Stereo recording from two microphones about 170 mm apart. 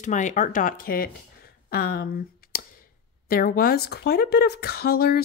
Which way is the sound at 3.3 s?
60° left (ahead or behind).